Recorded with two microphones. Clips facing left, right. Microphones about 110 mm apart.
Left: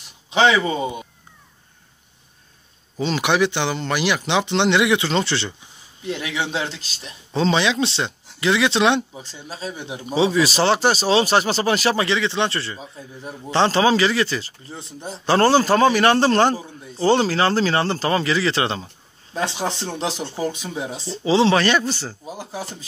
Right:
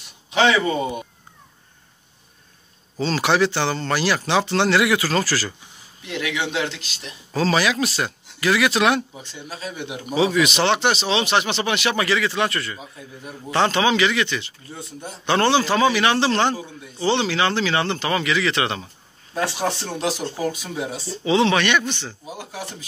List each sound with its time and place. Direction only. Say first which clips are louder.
0.3 s speech: left 1 dB; 20° left (ahead or behind)
3.0 s speech: even; 15° left (ahead or behind); by 6.8 s 35° left (ahead or behind)
7.3 s speech: left 1 dB; 25° left (ahead or behind)
9.2 s speech: left 1 dB; 35° left (ahead or behind)
19.3 s speech: right 1 dB; 20° left (ahead or behind)